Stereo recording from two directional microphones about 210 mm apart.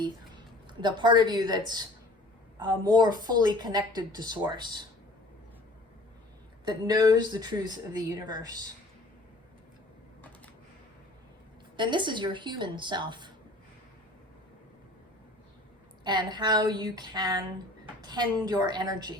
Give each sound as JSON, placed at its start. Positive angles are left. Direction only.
{"t": 0.0, "sound": "a woman's voice", "side_deg": -20}
{"t": 6.7, "sound": "a woman's voice", "side_deg": -20}
{"t": 11.8, "sound": "a woman's voice", "side_deg": -20}
{"t": 16.0, "sound": "a woman's voice", "side_deg": -20}